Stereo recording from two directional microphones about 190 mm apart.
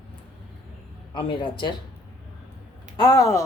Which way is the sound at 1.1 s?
25° left (ahead or behind).